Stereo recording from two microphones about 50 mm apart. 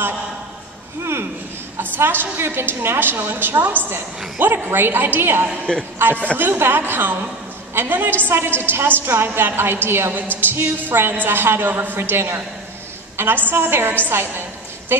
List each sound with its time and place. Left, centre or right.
2.0 s a woman's voice: right
13.2 s a woman's voice: right